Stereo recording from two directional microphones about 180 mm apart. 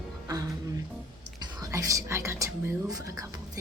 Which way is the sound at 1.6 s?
20° right (ahead or behind).